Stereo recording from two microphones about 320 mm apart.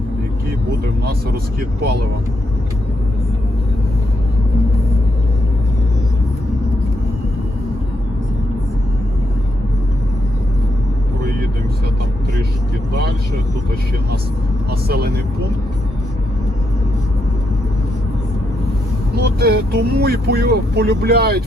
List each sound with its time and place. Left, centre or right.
14.7 s speech: right
19.1 s speech: right